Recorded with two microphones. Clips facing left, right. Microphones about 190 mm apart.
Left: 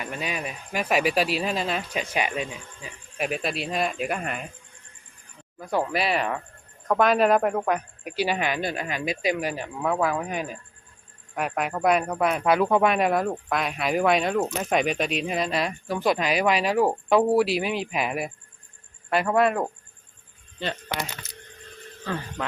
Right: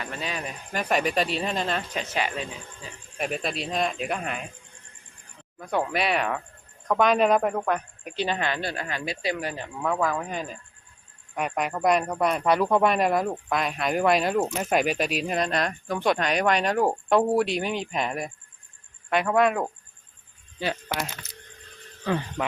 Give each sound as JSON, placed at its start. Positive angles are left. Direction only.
{"t": 0.0, "sound": "speech", "side_deg": 10}
{"t": 3.2, "sound": "speech", "side_deg": 5}
{"t": 5.5, "sound": "speech", "side_deg": 0}
{"t": 22.0, "sound": "speech", "side_deg": -15}